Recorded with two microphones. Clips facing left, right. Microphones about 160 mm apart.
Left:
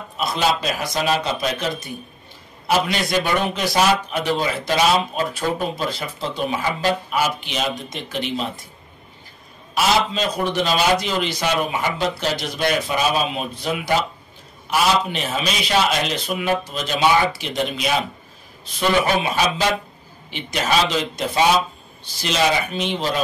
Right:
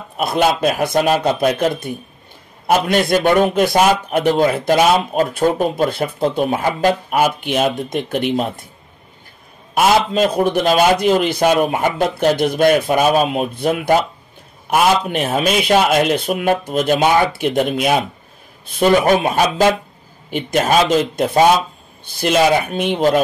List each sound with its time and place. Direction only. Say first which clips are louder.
0.2 s a man's voice: right 6 dB; 55° right (ahead or behind)
9.8 s a man's voice: right 6 dB; 50° right (ahead or behind)